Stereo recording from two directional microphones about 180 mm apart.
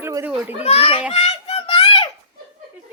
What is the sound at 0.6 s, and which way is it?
Speech, 35° left (ahead or behind).